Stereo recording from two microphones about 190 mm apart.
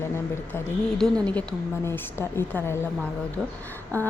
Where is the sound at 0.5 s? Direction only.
5° left (ahead or behind).